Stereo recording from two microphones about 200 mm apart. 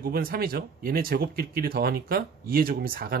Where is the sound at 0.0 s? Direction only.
50° right (ahead or behind).